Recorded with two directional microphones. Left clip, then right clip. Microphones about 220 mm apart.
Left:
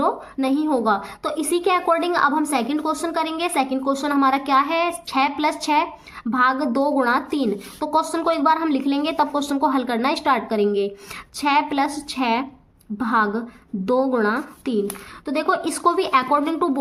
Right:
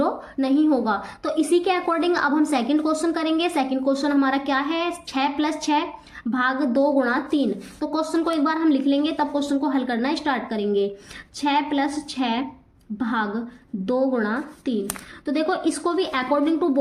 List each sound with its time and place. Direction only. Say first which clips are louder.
0.0 s a woman's voice: left 2 dB; 20° left (ahead or behind)